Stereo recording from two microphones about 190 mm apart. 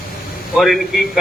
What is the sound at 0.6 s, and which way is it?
Speech, centre (ahead or behind).